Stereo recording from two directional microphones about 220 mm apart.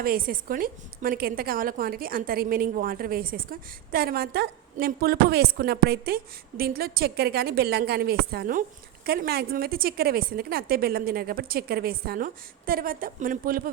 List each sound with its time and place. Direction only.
0.0 s a woman's voice: 40° right (ahead or behind)